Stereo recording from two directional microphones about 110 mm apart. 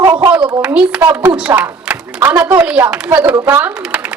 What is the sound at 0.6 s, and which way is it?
A woman's voice, 10° right (ahead or behind).